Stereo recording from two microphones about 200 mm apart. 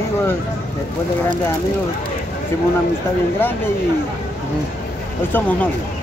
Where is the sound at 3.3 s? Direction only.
10° left (ahead or behind).